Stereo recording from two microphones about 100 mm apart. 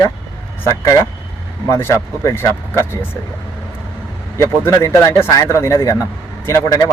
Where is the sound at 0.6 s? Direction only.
30° left (ahead or behind).